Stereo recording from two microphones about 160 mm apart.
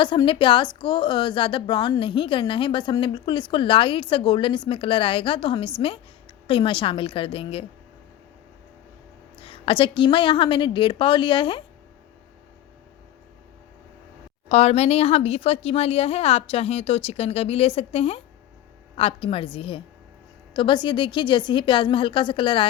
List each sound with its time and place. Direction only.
0.0 s a woman's voice: 30° left (ahead or behind)
9.4 s a woman's voice: 35° left (ahead or behind)
14.5 s a woman's voice: 40° left (ahead or behind)